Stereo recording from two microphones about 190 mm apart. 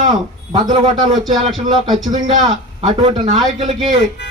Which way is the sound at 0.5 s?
20° right (ahead or behind).